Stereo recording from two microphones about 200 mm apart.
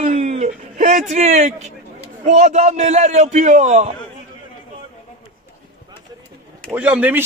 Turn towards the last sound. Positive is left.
turn(degrees=-10)  # may be behind; listen again after turning